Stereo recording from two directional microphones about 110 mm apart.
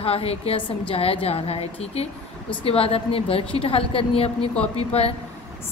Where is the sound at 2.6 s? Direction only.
60° left (ahead or behind).